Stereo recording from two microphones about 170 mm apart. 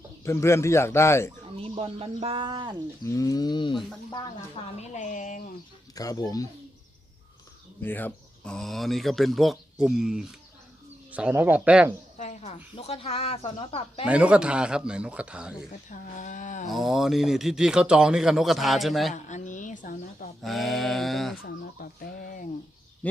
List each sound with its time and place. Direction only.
0.3 s speech: 15° left (ahead or behind)
1.5 s speech: 35° right (ahead or behind)
3.0 s speech: 20° left (ahead or behind)
4.8 s speech: 45° left (ahead or behind)
5.9 s speech: 20° left (ahead or behind)
7.8 s speech: 10° left (ahead or behind); by 11.9 s 5° right (ahead or behind)
12.1 s speech: 45° left (ahead or behind)
14.0 s speech: 5° right (ahead or behind)
15.9 s speech: 50° left (ahead or behind)
16.6 s speech: centre (ahead or behind)
19.1 s a woman's voice: 45° left (ahead or behind)
20.4 s speech: centre (ahead or behind)
21.4 s speech: 65° left (ahead or behind)